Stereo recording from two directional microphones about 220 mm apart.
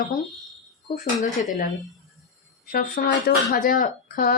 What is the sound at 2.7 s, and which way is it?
Speech, 40° left (ahead or behind).